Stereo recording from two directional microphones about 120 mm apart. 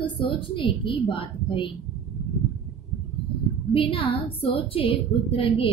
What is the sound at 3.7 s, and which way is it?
A woman's voice, 50° left (ahead or behind).